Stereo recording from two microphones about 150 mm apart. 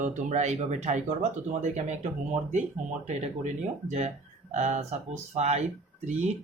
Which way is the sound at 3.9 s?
50° right (ahead or behind).